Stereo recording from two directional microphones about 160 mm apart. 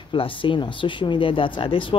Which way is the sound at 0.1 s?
30° left (ahead or behind).